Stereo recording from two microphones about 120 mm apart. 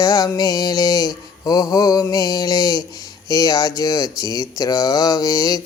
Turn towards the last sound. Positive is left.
turn(degrees=30)  # may be behind; listen again after turning